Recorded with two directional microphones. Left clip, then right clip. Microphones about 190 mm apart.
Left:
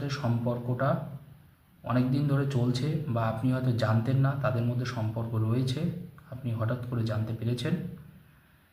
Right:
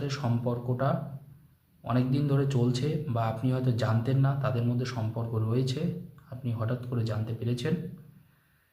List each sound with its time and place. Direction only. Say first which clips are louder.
0.0 s a man's voice: even; 15° right (ahead or behind)